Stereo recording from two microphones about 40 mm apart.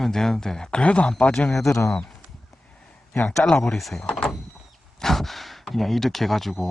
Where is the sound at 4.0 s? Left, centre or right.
Left.